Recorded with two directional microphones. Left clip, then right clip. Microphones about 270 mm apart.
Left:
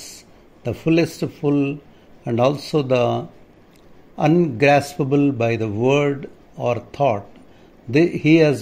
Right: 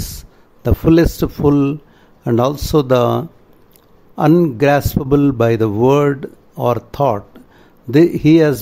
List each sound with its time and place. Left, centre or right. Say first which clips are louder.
0.6 s a man's voice: right 6 dB; right